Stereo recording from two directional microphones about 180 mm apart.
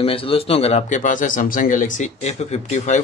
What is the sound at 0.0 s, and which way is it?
Speech, 30° left (ahead or behind).